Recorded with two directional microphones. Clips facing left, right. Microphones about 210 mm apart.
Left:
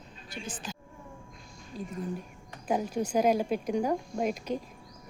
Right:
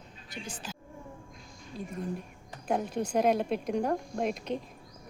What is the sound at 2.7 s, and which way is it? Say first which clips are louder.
A woman's voice: left 1 dB; 5° left (ahead or behind).